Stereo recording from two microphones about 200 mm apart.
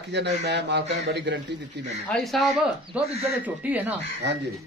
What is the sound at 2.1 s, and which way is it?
A man's voice, centre (ahead or behind).